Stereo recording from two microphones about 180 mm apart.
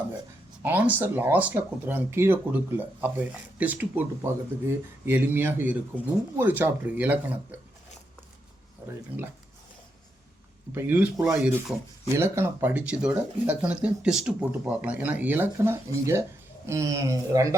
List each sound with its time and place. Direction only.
0.6 s speech: 10° right (ahead or behind)
8.8 s speech: 15° right (ahead or behind)
10.8 s speech: 10° right (ahead or behind)